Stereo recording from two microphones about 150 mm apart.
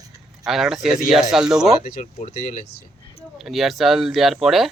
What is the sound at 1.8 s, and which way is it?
Speech, 80° left.